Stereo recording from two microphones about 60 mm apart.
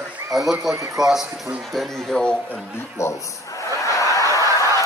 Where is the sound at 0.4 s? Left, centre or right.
Right.